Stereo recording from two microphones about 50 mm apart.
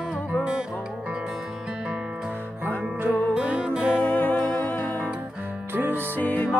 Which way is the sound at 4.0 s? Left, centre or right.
Left.